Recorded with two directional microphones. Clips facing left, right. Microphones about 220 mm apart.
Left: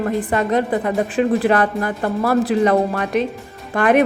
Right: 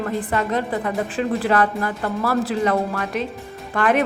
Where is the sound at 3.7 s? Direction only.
15° left (ahead or behind).